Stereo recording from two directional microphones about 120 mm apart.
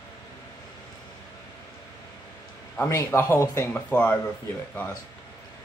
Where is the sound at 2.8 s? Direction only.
25° left (ahead or behind).